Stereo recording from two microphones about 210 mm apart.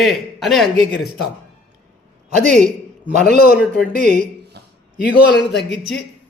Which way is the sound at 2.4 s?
35° right (ahead or behind).